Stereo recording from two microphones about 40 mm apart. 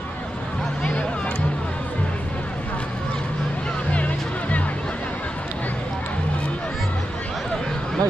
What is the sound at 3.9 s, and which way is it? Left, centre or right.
Music, left.